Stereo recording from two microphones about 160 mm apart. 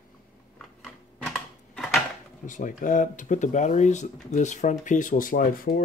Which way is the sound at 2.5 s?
55° left (ahead or behind).